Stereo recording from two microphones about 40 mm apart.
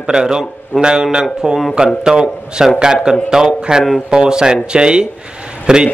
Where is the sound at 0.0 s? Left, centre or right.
Centre.